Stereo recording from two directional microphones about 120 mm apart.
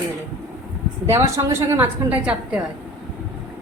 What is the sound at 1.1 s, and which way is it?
A woman's voice, 20° right (ahead or behind).